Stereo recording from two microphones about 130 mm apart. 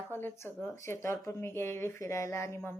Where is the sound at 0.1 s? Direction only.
15° left (ahead or behind).